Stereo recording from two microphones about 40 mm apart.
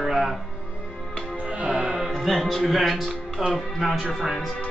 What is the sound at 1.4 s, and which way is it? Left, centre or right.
Music, right.